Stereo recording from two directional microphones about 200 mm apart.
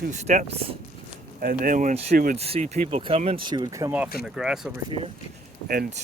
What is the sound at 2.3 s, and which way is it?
Speech, 30° right (ahead or behind).